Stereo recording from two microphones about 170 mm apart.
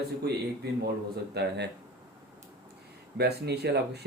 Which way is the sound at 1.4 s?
75° right (ahead or behind).